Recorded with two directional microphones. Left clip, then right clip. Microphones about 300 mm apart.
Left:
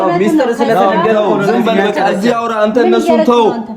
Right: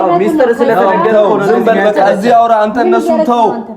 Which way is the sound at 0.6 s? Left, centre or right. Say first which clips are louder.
Right 1 dB; centre.